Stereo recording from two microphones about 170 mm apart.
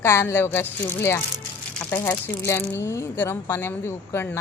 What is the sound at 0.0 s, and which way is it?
Speech, 15° left (ahead or behind).